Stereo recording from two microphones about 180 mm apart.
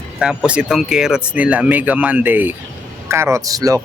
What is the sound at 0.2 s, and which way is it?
Speech, 5° right (ahead or behind).